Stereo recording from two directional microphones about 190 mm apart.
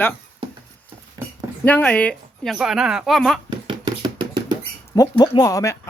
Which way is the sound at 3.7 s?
25° right (ahead or behind).